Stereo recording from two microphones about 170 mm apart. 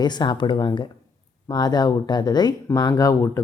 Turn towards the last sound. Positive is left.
turn(degrees=20)  # may be behind; listen again after turning